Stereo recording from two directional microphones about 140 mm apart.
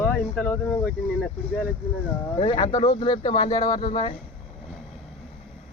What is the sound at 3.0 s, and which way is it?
A man's voice, 35° left (ahead or behind).